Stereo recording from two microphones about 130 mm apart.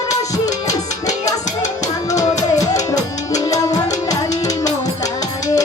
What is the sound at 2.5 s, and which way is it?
Music, 25° left (ahead or behind).